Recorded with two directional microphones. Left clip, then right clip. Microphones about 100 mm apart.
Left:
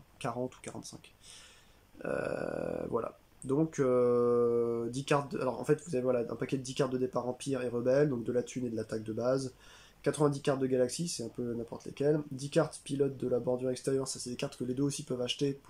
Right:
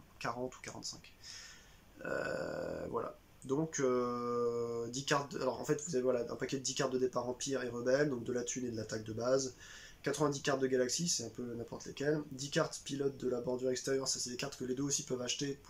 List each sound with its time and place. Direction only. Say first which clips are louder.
0.2 s speech: left 3 dB; 35° left (ahead or behind)
2.0 s speech: left 3 dB; 30° left (ahead or behind)